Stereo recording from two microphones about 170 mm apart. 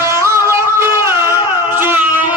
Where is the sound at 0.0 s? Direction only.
15° right (ahead or behind).